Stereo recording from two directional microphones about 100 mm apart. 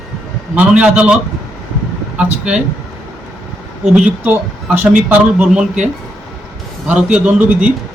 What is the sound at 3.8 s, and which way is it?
Speech, 5° right (ahead or behind).